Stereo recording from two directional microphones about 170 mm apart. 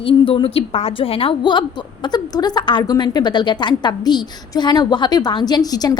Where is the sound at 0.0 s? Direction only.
30° left (ahead or behind).